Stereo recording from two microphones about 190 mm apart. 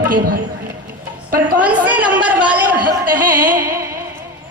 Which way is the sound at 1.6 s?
10° right (ahead or behind).